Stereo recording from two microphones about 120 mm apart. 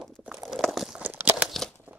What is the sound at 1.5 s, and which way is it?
Crumpling, 5° left (ahead or behind).